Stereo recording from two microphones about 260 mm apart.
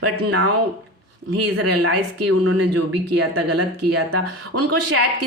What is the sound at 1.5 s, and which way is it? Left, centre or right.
A woman's voice, right.